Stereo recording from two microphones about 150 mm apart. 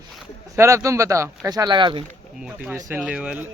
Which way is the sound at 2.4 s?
5° right (ahead or behind).